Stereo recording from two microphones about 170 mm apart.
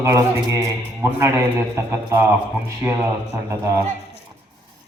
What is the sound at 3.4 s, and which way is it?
Speech, 15° right (ahead or behind).